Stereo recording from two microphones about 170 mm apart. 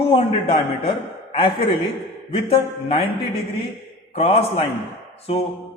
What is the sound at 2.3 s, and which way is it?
Speech, 35° left (ahead or behind).